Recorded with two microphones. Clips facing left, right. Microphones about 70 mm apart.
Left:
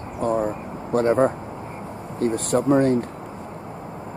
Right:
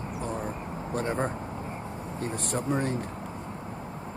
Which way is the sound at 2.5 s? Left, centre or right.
Left.